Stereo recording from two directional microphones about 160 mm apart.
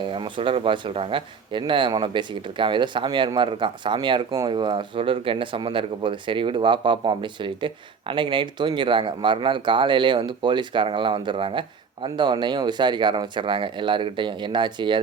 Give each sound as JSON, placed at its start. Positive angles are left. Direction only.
{"t": 0.0, "sound": "a man's voice", "side_deg": -30}